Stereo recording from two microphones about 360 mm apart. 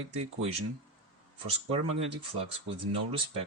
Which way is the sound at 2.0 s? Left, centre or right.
Centre.